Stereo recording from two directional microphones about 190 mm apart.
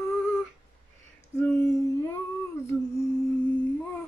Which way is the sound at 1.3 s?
5° left (ahead or behind).